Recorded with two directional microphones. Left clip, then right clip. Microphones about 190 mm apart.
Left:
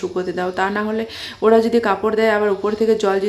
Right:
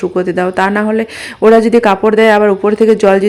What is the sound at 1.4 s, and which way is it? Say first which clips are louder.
Speech: right 7 dB; 35° right (ahead or behind).